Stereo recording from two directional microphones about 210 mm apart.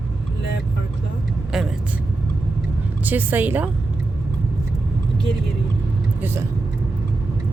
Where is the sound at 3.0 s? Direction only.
10° right (ahead or behind).